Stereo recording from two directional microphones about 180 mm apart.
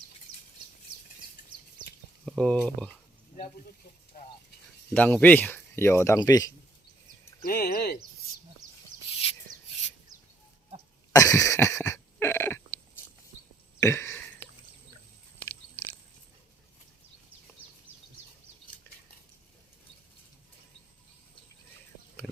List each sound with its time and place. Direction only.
2.2 s speech: 5° left (ahead or behind)
4.1 s speech: 55° left (ahead or behind)
4.9 s speech: 10° left (ahead or behind)
7.4 s speech: 55° left (ahead or behind)
11.1 s a sound: 20° left (ahead or behind)
22.2 s a sound: 5° left (ahead or behind)